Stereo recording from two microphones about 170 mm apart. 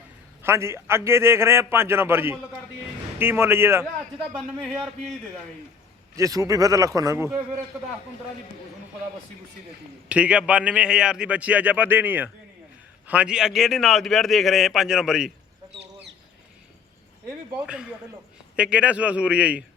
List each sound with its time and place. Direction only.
0.4 s a man's voice: 15° right (ahead or behind)
6.1 s speech: 20° right (ahead or behind)
10.1 s a man's voice: 5° right (ahead or behind)
18.5 s a man's voice: 5° right (ahead or behind)